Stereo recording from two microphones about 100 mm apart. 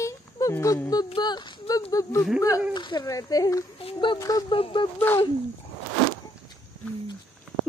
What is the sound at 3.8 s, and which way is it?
Speech, 55° left (ahead or behind).